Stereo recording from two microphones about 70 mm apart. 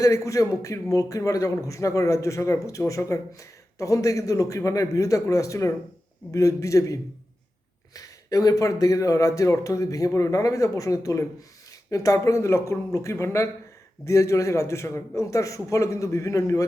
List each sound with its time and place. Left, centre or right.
0.0 s speech: left